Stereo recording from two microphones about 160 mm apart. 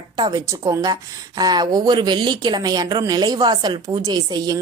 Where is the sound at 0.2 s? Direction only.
25° right (ahead or behind).